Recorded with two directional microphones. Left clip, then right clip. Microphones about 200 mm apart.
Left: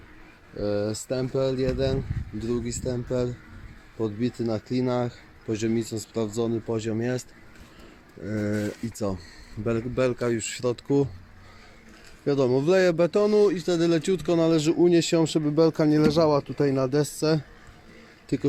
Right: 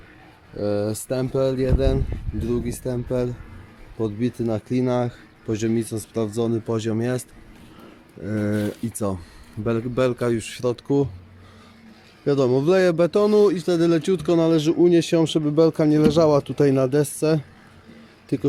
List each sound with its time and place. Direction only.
0.5 s speech: 5° right (ahead or behind)
12.2 s speech: 5° right (ahead or behind)